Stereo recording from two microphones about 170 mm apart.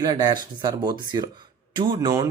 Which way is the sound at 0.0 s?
25° right (ahead or behind).